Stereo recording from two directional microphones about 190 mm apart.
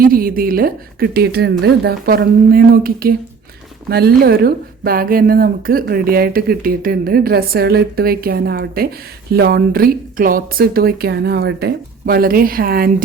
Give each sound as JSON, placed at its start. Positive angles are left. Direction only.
{"t": 0.0, "sound": "speech", "side_deg": -50}